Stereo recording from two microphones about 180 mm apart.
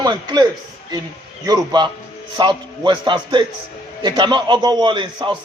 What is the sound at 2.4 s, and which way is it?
A man's voice, 25° right (ahead or behind).